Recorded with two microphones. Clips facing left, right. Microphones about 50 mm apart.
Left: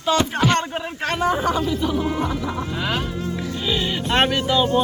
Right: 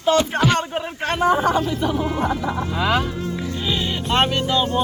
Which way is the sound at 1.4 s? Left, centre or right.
Right.